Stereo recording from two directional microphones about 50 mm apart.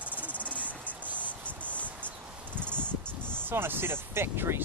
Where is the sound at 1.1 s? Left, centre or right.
Left.